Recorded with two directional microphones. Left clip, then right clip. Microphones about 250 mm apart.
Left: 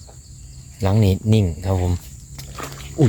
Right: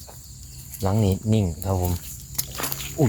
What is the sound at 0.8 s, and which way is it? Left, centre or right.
Speech, left.